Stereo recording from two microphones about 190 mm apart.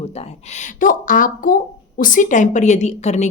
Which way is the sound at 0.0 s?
35° left (ahead or behind).